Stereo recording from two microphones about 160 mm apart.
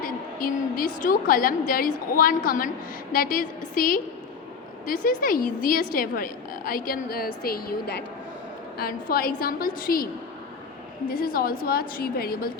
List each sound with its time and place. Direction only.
0.0 s a woman's voice: 60° left (ahead or behind); by 8.0 s 80° left
8.8 s a woman's voice: 65° left (ahead or behind)
11.1 s a woman's voice: 65° left (ahead or behind)